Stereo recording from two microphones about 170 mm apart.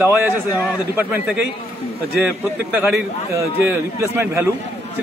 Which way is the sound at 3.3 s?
15° right (ahead or behind).